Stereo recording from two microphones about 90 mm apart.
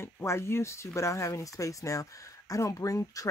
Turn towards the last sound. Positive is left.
turn(degrees=40)  # may be behind; listen again after turning